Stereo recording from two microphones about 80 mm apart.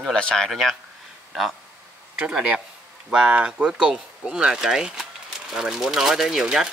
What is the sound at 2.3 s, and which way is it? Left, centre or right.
Speech, centre.